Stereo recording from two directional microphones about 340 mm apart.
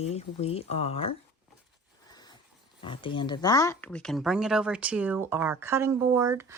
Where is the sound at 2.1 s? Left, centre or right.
Centre.